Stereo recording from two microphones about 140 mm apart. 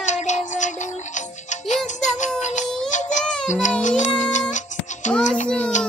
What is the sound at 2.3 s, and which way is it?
Baby cry, 55° left (ahead or behind).